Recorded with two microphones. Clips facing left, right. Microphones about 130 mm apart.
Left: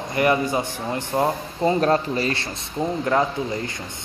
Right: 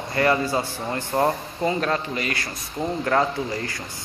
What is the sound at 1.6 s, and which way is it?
Speech, 35° left (ahead or behind).